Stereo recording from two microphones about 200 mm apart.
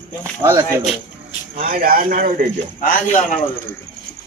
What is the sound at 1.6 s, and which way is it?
Speech, 45° right (ahead or behind).